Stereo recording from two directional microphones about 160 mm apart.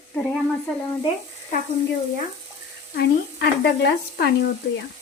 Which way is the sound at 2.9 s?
90° left.